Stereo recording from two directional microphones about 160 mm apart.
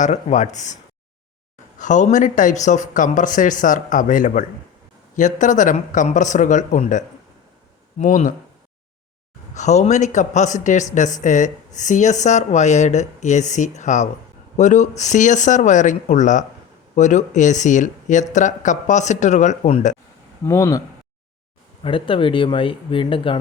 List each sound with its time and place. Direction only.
0.0 s speech: 45° left (ahead or behind)
1.8 s speech: 50° left (ahead or behind)
9.6 s speech: 45° left (ahead or behind)
20.4 s speech: 20° left (ahead or behind)
21.8 s speech: 35° left (ahead or behind)